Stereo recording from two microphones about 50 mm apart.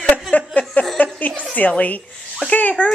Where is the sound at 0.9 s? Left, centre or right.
Left.